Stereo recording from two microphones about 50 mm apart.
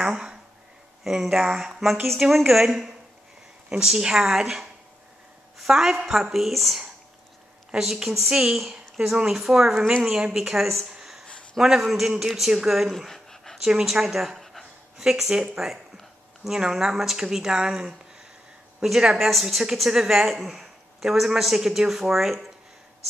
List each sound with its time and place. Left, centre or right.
0.0 s a sound: centre
1.0 s speech: centre
7.8 s speech: centre
10.9 s a sound: centre
11.5 s speech: centre
12.9 s dog: centre
13.6 s speech: centre